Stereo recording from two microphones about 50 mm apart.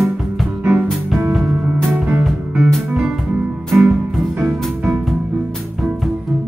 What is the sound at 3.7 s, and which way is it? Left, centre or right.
Music, centre.